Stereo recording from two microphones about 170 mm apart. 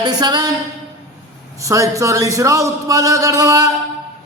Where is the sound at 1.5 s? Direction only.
20° right (ahead or behind).